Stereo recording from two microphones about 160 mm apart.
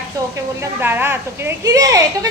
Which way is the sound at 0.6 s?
15° right (ahead or behind).